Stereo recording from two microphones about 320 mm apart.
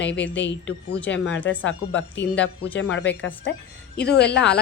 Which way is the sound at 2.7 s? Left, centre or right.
Left.